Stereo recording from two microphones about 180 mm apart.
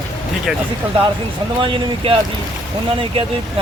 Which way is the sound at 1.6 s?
30° right (ahead or behind).